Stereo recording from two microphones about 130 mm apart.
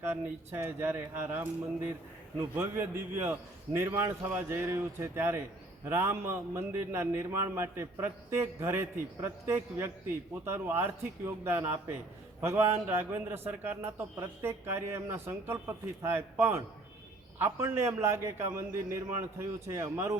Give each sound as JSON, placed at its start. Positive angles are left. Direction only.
{"t": 0.0, "sound": "a man's voice", "side_deg": -15}